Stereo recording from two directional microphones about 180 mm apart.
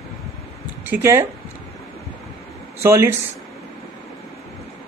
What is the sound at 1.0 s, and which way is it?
Speech, 15° right (ahead or behind).